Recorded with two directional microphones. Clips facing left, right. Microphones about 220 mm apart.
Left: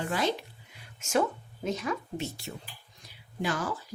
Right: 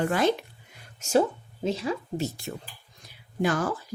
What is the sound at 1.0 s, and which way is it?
Speech, 35° right (ahead or behind).